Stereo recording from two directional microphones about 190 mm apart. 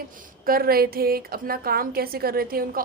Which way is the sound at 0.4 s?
50° right (ahead or behind).